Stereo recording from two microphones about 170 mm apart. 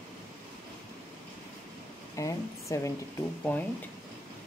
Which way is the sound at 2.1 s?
20° left (ahead or behind).